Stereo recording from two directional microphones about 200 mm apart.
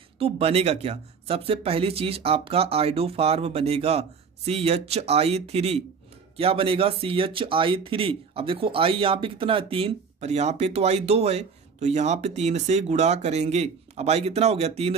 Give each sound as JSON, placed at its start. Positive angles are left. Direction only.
{"t": 0.2, "sound": "speech", "side_deg": -30}